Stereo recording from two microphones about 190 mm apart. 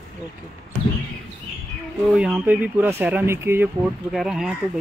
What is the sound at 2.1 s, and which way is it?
Speech, 5° right (ahead or behind).